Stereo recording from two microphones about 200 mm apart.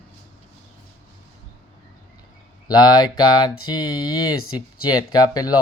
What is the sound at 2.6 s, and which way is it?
Speech, 20° left (ahead or behind).